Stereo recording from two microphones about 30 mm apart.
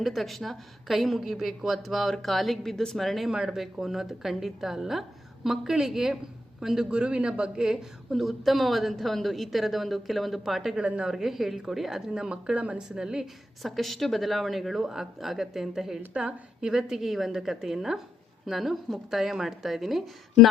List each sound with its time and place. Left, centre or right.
0.1 s a woman's voice: centre
3.5 s a woman's voice: centre
6.9 s a man's voice: right
7.6 s a woman's voice: centre
8.1 s a woman's voice: centre
10.8 s a man's voice: right
11.1 s a woman's voice: centre
12.5 s speech: right
12.9 s a woman's voice: right
13.6 s a woman's voice: centre
17.0 s a woman's voice: centre